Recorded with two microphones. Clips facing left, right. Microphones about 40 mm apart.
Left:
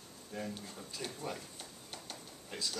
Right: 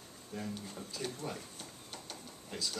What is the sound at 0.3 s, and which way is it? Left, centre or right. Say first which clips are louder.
Speech: right 1 dB; centre.